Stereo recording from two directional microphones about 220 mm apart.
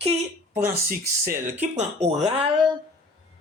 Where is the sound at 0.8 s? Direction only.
40° right (ahead or behind).